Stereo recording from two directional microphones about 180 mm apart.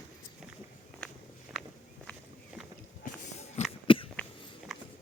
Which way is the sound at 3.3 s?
40° left (ahead or behind).